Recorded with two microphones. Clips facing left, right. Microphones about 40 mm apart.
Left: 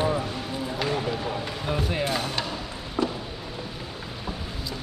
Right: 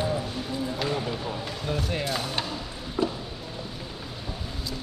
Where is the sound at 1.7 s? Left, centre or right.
Centre.